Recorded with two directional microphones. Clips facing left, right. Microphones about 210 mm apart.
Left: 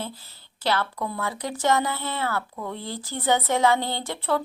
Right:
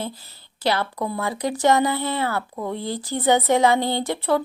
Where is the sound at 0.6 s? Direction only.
15° right (ahead or behind).